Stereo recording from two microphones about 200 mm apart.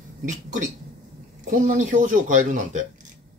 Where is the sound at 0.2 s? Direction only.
40° right (ahead or behind).